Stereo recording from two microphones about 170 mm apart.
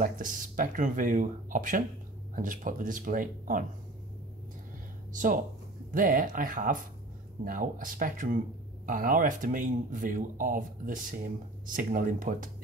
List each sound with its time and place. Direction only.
0.0 s speech: 50° right (ahead or behind)
5.1 s speech: 50° right (ahead or behind)